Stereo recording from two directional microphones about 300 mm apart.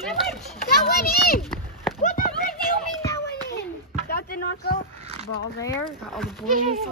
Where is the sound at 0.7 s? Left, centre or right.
Left.